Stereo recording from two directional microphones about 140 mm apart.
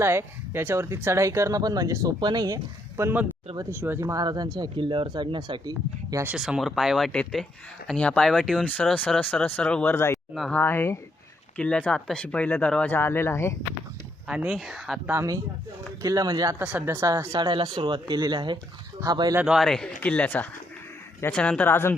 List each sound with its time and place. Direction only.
0.0 s speech: 15° right (ahead or behind)
3.0 s speech: 15° right (ahead or behind)
4.2 s speech: 30° right (ahead or behind)
6.2 s speech: 5° right (ahead or behind); by 10.2 s 20° left (ahead or behind)
10.3 s speech: centre (ahead or behind)
10.6 s speech: 15° left (ahead or behind)
14.3 s speech: 5° right (ahead or behind)
15.1 s speech: 20° right (ahead or behind)
16.6 s speech: 10° right (ahead or behind); by 19.4 s 30° right (ahead or behind)
19.4 s speech: 5° right (ahead or behind); by 21.9 s 15° left (ahead or behind)